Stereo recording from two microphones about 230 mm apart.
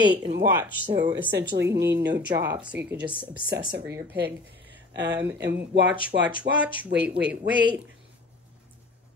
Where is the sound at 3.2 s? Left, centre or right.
Centre.